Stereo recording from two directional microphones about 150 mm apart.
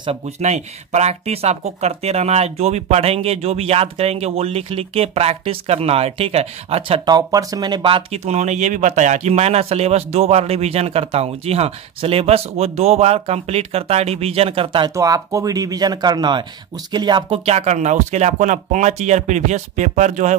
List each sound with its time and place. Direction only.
0.4 s speech: 50° right (ahead or behind)
7.1 s speech: 25° right (ahead or behind)
8.3 s speech: 50° right (ahead or behind)
15.0 s speech: 20° right (ahead or behind)
17.5 s speech: 50° right (ahead or behind)